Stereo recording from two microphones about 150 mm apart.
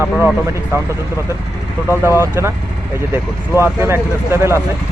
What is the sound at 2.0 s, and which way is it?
Speech, 15° right (ahead or behind).